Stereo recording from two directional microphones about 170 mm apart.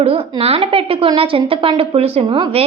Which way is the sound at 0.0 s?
35° right (ahead or behind).